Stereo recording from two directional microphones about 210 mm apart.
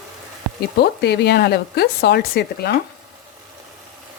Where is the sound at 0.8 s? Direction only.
50° left (ahead or behind).